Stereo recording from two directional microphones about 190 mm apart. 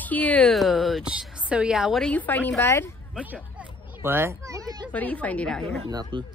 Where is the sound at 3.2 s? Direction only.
10° right (ahead or behind).